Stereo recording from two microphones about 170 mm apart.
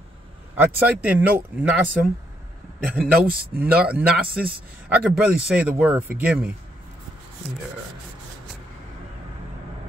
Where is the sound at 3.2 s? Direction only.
65° right (ahead or behind).